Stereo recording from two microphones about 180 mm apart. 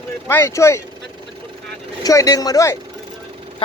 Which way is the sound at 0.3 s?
15° left (ahead or behind).